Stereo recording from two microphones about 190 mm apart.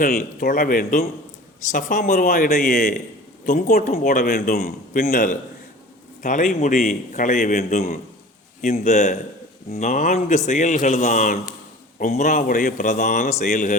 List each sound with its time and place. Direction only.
0.0 s a man's voice: 55° left (ahead or behind)